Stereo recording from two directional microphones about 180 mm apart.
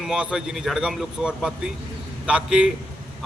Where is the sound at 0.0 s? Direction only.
5° right (ahead or behind).